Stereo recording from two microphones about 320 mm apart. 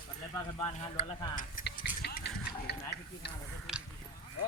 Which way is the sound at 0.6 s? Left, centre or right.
Centre.